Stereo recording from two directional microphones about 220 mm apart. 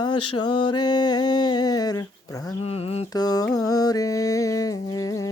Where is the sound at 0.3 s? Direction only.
20° left (ahead or behind).